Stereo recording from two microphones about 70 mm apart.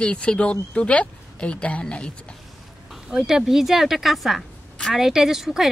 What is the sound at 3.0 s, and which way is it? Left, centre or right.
Speech, centre.